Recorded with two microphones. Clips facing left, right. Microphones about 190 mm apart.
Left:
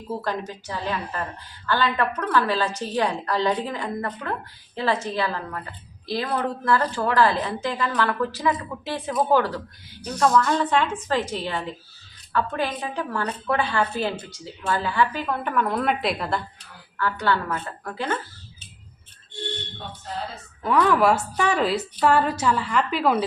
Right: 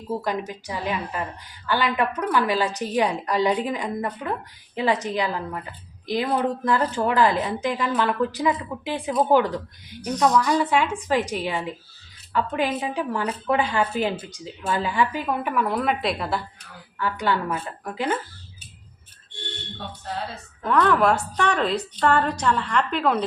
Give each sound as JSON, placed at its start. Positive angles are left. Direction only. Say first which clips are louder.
{"t": 0.1, "sound": "a woman's voice", "louder": "right 2 dB", "side_deg": -15}
{"t": 17.0, "sound": "a woman's voice", "louder": "even", "side_deg": -15}
{"t": 20.7, "sound": "a woman's voice", "louder": "even", "side_deg": 5}